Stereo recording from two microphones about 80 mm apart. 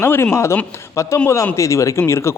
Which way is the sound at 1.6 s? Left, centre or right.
Left.